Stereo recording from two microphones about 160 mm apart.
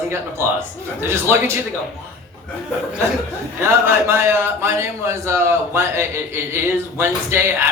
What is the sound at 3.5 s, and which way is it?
A man's voice, 15° right (ahead or behind).